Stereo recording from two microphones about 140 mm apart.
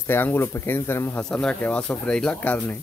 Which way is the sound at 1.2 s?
5° left (ahead or behind).